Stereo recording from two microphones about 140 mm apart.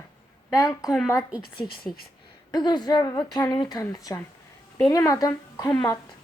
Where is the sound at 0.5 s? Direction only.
25° left (ahead or behind).